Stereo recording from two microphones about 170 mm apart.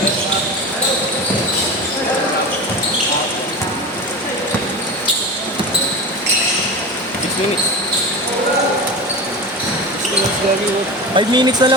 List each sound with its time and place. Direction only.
11.1 s speech: 25° right (ahead or behind)